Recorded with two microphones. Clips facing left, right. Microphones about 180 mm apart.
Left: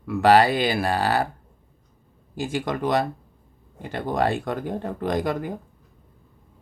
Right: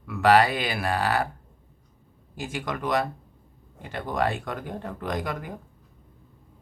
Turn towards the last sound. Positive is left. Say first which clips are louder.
# left 6 dB
turn(degrees=35)  # may be behind; listen again after turning